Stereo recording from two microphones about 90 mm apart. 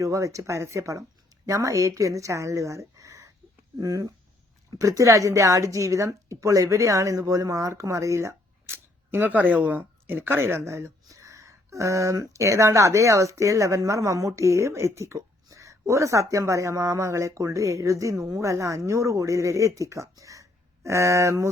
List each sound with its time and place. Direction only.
0.0 s speech: 35° right (ahead or behind)